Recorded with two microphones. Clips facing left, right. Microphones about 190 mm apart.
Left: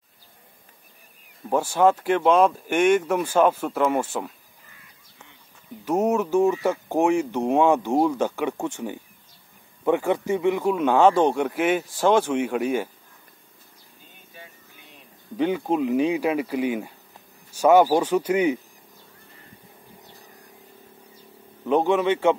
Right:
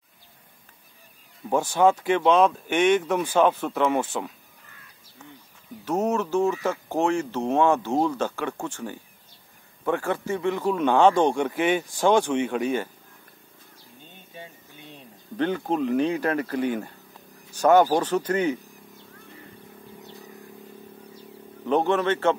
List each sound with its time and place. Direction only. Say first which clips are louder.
1.5 s speech: left 1 dB; 5° left (ahead or behind)
5.9 s speech: left 3 dB; 15° left (ahead or behind)
14.0 s a sound: right 4 dB; 25° right (ahead or behind)
15.3 s speech: left 2 dB; 10° left (ahead or behind)
21.6 s speech: left 2 dB; 10° left (ahead or behind)